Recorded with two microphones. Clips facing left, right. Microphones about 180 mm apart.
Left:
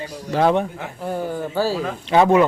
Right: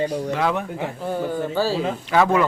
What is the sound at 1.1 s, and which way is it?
Speech, 15° left (ahead or behind).